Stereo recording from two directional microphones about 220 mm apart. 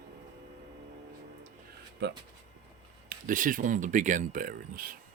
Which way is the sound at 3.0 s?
35° right (ahead or behind).